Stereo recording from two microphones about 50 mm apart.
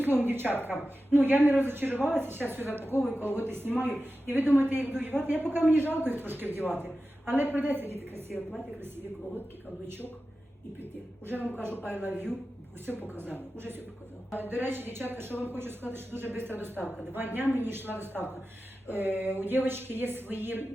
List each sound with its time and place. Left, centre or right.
0.0 s speech: right
8.3 s a woman's voice: centre
11.8 s speech: right